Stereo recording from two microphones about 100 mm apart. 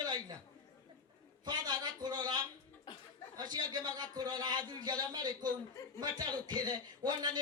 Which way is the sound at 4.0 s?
40° right (ahead or behind).